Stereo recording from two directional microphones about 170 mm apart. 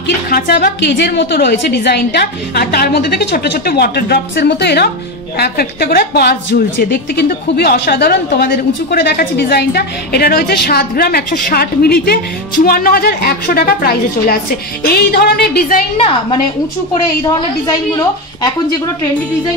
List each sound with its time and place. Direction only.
0.0 s a woman's voice: 65° left (ahead or behind)